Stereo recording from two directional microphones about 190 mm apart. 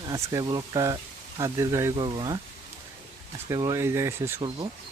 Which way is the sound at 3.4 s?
20° right (ahead or behind).